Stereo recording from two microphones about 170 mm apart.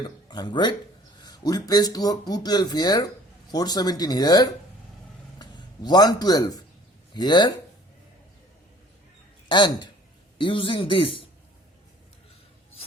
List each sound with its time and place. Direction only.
0.0 s speech: 25° left (ahead or behind)
9.5 s a man's voice: 25° left (ahead or behind)